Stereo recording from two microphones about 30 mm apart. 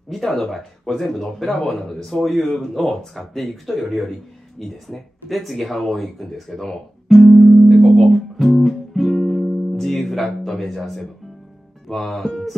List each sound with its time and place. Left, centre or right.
0.1 s speech: centre
3.6 s speech: centre
8.4 s music: centre
9.8 s speech: centre